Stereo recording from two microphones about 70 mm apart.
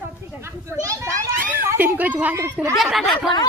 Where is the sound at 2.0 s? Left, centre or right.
Right.